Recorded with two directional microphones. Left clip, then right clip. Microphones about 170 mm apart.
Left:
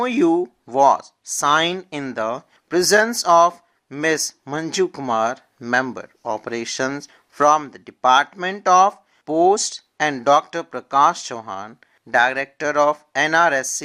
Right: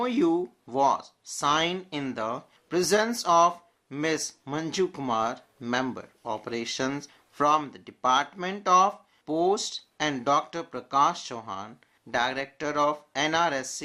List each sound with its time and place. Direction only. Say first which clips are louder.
0.0 s speech: left 7 dB; 45° left (ahead or behind)